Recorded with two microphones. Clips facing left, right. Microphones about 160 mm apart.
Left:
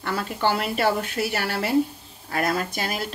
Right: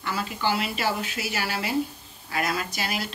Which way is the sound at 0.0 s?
55° left (ahead or behind).